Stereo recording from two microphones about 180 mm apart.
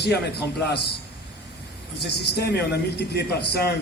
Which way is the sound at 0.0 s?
65° left (ahead or behind).